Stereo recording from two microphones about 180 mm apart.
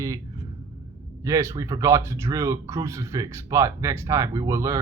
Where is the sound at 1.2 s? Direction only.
15° right (ahead or behind).